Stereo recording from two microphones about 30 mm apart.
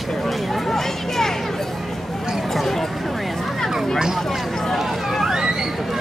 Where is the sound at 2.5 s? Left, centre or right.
Centre.